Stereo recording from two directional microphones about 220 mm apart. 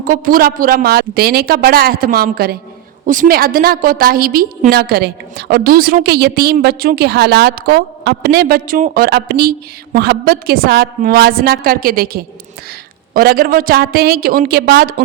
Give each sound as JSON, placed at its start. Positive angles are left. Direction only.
{"t": 0.0, "sound": "a woman's voice", "side_deg": -40}